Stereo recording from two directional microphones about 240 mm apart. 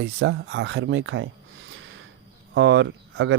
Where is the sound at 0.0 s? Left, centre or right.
Right.